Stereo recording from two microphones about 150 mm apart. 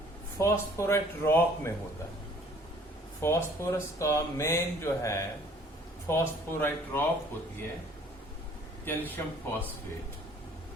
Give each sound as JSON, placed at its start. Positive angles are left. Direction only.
{"t": 0.3, "sound": "speech", "side_deg": 20}
{"t": 3.2, "sound": "speech", "side_deg": 15}
{"t": 8.8, "sound": "speech", "side_deg": 15}